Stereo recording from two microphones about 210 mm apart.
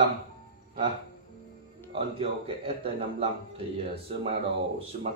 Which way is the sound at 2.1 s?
25° right (ahead or behind).